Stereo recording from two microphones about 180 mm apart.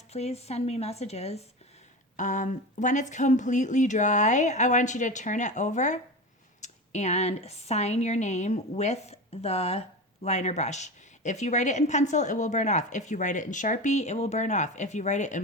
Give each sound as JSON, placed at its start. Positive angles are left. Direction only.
{"t": 0.1, "sound": "a woman's voice", "side_deg": 35}